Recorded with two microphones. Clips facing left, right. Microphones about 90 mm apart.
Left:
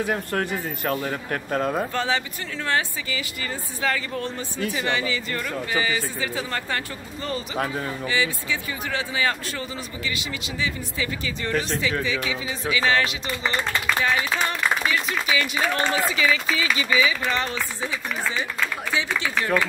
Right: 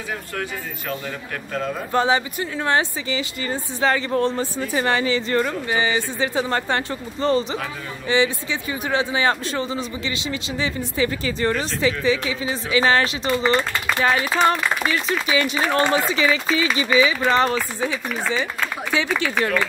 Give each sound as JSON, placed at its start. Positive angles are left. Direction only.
{"t": 0.1, "sound": "a man's voice", "side_deg": 45}
{"t": 2.0, "sound": "a man's voice", "side_deg": -20}
{"t": 14.9, "sound": "speech", "side_deg": -35}
{"t": 18.9, "sound": "speech", "side_deg": -65}